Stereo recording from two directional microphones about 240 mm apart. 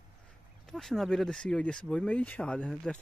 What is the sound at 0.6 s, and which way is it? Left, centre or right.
Speech, centre.